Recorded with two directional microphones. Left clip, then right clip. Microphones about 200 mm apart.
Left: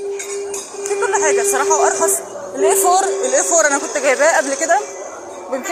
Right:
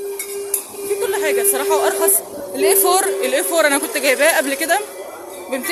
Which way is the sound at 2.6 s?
35° right (ahead or behind).